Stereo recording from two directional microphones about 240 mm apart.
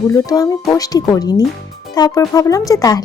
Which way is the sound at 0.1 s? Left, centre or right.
Centre.